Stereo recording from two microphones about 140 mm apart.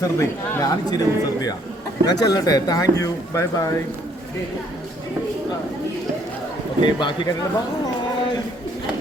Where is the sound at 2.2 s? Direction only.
25° left (ahead or behind).